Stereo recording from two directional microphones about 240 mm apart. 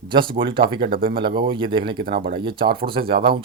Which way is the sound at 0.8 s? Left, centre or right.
Right.